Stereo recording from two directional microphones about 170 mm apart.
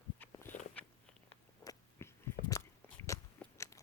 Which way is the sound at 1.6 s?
15° left (ahead or behind).